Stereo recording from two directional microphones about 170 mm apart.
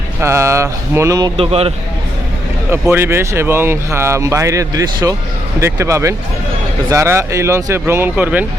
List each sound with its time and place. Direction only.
0.2 s speech: 15° right (ahead or behind)
1.4 s speech: 35° right (ahead or behind)
2.6 s speech: 15° right (ahead or behind)